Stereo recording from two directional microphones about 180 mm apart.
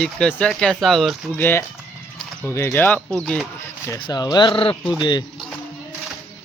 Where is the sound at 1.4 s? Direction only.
10° left (ahead or behind).